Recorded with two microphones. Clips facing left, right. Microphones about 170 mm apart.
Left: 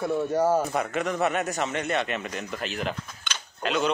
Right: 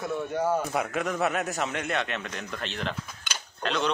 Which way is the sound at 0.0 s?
35° left (ahead or behind).